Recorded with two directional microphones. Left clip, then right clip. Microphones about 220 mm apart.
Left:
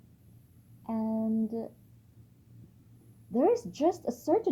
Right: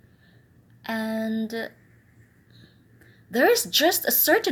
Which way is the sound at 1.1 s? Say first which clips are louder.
Right 4 dB; 20° right (ahead or behind).